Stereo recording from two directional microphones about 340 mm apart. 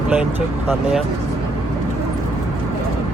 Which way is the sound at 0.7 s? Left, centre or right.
Centre.